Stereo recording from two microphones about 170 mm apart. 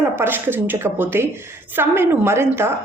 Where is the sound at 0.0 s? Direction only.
10° right (ahead or behind).